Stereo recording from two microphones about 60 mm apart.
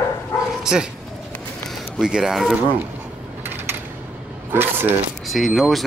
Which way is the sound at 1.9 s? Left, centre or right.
Centre.